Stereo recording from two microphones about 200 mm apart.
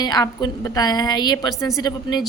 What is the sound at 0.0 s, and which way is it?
A woman's voice, 20° left (ahead or behind).